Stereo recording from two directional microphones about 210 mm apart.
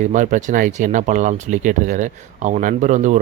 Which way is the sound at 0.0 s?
35° right (ahead or behind).